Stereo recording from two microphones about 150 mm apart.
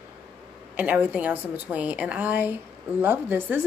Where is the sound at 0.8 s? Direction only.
10° right (ahead or behind).